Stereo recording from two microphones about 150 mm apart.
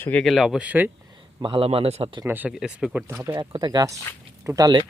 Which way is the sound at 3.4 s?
30° right (ahead or behind).